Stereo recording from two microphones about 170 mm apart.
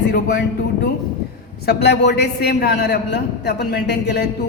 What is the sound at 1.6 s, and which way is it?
A man's voice, 75° left (ahead or behind).